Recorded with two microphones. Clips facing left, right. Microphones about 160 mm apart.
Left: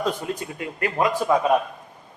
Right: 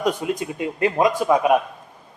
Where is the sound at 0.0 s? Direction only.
15° right (ahead or behind).